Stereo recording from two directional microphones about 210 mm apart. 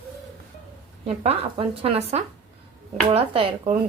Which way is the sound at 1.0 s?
30° right (ahead or behind).